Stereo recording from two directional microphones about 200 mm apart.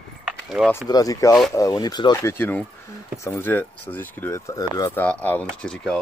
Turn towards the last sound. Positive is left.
turn(degrees=5)  # may be behind; listen again after turning